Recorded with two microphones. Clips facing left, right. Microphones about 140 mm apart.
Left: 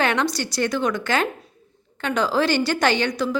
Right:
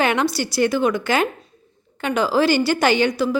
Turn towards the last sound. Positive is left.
turn(degrees=-5)  # may be behind; listen again after turning